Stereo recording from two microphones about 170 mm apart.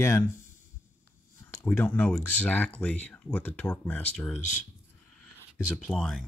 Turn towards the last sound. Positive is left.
turn(degrees=5)  # may be behind; listen again after turning